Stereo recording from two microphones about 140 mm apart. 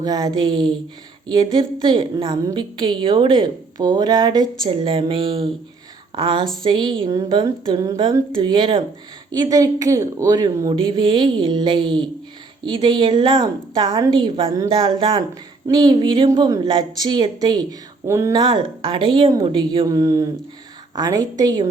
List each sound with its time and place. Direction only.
0.0 s a woman's voice: 30° right (ahead or behind)
18.3 s a woman's voice: 35° right (ahead or behind)
19.9 s a woman's voice: 25° right (ahead or behind)